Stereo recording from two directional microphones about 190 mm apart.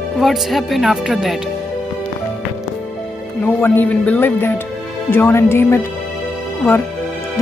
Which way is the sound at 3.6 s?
10° left (ahead or behind).